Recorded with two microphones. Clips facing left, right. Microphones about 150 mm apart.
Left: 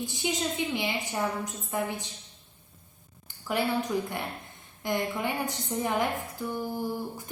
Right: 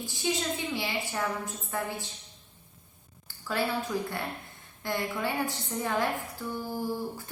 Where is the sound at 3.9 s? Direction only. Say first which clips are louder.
Left 1 dB; 20° left (ahead or behind).